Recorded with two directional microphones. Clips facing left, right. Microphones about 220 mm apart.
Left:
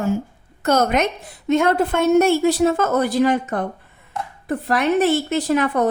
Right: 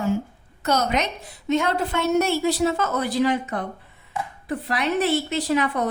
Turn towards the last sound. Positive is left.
turn(degrees=50)  # may be behind; listen again after turning